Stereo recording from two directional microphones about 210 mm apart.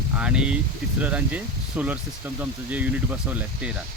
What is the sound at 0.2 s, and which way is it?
Speech, 5° right (ahead or behind).